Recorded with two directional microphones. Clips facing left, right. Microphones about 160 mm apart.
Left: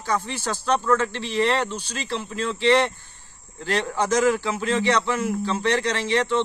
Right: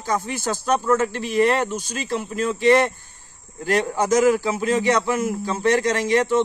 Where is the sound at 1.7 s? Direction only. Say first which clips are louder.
Right 4 dB; 45° right (ahead or behind).